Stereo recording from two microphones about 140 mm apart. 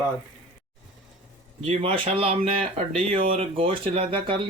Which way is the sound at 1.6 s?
40° right (ahead or behind).